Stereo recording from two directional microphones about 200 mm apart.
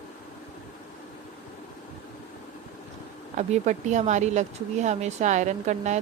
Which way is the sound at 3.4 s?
35° right (ahead or behind).